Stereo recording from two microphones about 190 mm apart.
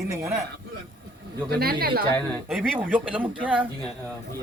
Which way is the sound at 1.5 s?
55° right (ahead or behind).